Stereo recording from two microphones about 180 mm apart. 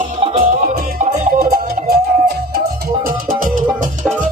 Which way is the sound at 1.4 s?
60° right (ahead or behind).